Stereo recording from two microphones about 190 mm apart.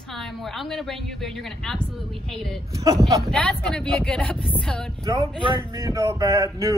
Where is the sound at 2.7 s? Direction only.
15° right (ahead or behind).